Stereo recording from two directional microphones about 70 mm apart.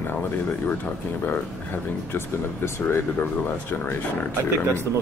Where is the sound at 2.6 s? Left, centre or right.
Left.